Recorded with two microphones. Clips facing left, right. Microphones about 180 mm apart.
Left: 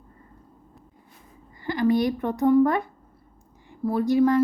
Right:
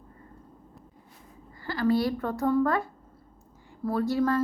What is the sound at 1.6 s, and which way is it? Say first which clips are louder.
A woman's voice: left 3 dB; 20° left (ahead or behind).